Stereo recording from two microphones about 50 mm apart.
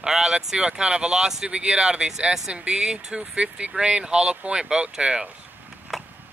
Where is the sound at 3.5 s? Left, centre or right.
Right.